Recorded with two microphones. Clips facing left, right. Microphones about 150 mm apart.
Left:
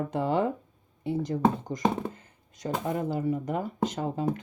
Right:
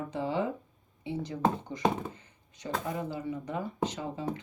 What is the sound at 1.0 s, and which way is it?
Speech, 45° left (ahead or behind).